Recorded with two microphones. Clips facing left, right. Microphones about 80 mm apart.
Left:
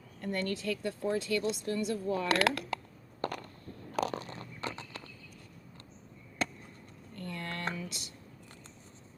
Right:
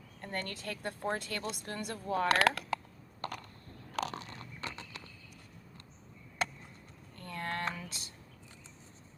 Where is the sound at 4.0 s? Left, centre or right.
Left.